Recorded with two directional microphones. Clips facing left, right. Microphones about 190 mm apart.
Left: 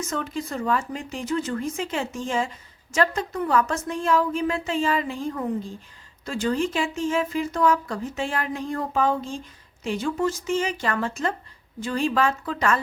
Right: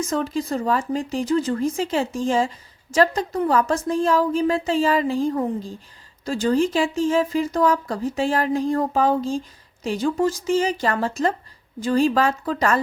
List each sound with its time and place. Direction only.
0.1 s speech: 35° right (ahead or behind)